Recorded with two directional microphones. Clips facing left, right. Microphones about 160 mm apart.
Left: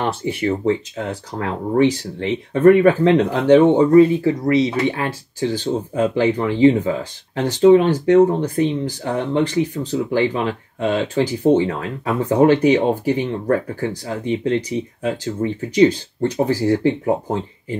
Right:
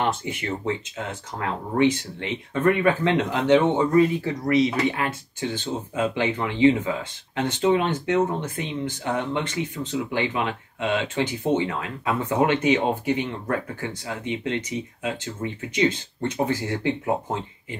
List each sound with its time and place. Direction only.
0.0 s speech: 35° left (ahead or behind)